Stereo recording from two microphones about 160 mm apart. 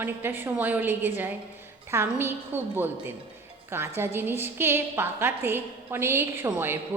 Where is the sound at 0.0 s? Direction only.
15° right (ahead or behind).